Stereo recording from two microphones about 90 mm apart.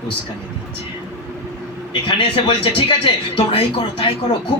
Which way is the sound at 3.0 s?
90° left.